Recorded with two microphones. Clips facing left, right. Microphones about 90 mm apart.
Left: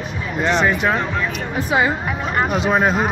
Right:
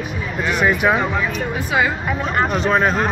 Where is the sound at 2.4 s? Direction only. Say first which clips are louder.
Even; 5° left (ahead or behind).